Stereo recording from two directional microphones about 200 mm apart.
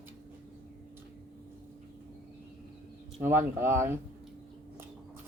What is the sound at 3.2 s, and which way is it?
Speech, 10° right (ahead or behind).